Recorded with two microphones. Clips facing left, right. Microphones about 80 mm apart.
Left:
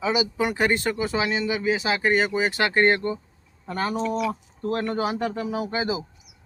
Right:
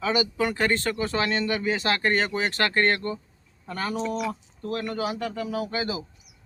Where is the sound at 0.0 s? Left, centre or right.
Centre.